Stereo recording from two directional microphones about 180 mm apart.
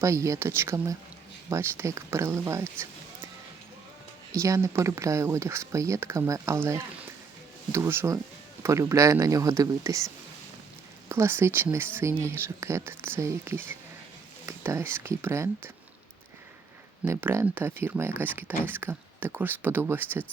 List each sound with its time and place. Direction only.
0.0 s speech: 15° right (ahead or behind)
4.3 s speech: 20° right (ahead or behind)
11.1 s speech: 15° right (ahead or behind)
17.1 s speech: 15° right (ahead or behind)